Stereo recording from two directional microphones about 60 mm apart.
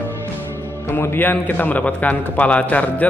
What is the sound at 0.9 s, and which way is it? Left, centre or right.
A man's voice, left.